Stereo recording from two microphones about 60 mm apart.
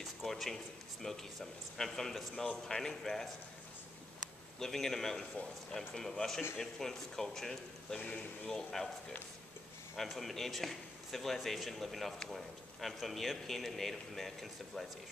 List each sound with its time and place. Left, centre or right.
0.0 s speech: centre
4.6 s speech: centre
8.0 s speech: left
8.5 s speech: centre
9.9 s a man's voice: centre